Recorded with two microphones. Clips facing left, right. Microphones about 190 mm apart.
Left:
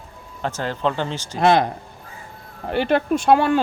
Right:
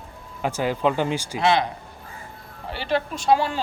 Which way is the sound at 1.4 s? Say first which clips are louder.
Left 5 dB; 50° left (ahead or behind).